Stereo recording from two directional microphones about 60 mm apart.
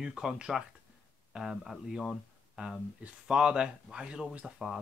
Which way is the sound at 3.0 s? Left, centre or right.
Centre.